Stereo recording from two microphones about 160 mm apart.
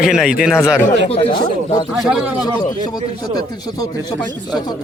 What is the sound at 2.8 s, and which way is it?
Speech, 25° left (ahead or behind).